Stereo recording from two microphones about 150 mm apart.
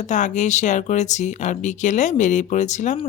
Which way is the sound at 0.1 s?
55° left (ahead or behind).